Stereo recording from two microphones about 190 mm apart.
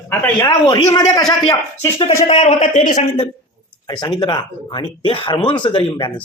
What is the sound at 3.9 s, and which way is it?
Speech, 25° left (ahead or behind).